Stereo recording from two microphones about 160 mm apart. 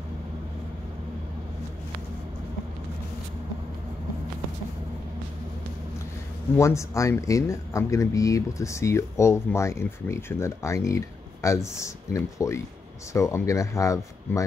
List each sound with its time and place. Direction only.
6.5 s speech: 20° left (ahead or behind)